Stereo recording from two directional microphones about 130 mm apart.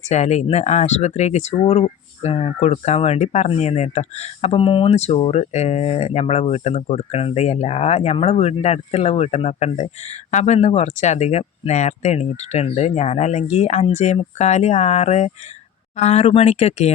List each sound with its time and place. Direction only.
0.1 s speech: 60° left (ahead or behind)